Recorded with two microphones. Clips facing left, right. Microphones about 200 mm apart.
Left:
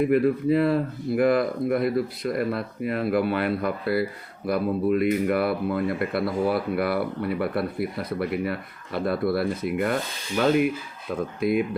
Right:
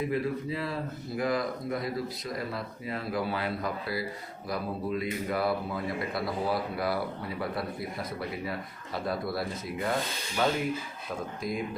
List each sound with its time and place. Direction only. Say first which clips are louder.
0.0 s speech: left 9 dB; 60° left (ahead or behind)
11.3 s speech: left 12 dB; 65° left (ahead or behind)